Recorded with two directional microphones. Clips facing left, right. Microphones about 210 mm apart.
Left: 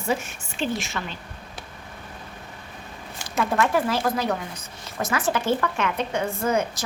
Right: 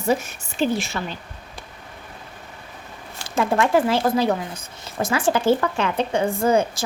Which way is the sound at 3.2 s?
25° right (ahead or behind).